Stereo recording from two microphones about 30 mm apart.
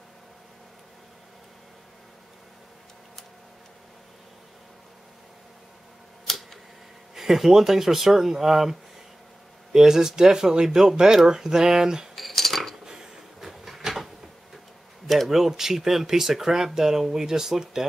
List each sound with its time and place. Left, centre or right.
6.2 s tick: centre
7.2 s a man's voice: centre
12.2 s cutlery: centre
12.8 s a sound: right
13.4 s a sound: centre
15.2 s speech: centre